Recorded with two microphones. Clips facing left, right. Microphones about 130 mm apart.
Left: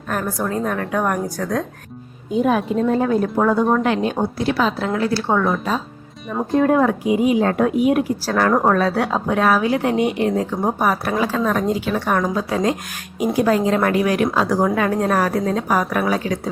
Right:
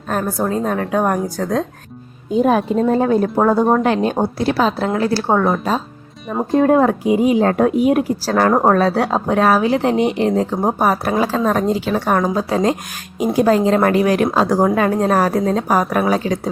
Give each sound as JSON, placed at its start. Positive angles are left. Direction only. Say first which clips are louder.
{"t": 0.1, "sound": "a woman's voice", "louder": "right 3 dB", "side_deg": -30}